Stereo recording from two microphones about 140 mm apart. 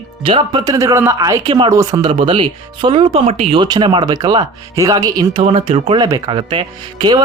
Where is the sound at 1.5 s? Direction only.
35° right (ahead or behind).